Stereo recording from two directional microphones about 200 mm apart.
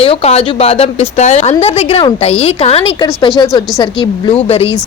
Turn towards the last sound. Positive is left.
turn(degrees=30)  # may be behind; listen again after turning